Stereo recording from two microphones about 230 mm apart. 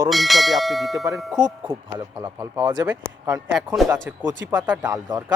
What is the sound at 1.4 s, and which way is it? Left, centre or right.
Speech, centre.